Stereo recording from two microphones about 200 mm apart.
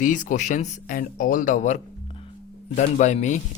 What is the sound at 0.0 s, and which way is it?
Speech, 40° left (ahead or behind).